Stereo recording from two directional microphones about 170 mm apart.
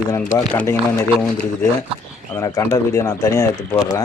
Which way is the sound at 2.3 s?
15° left (ahead or behind).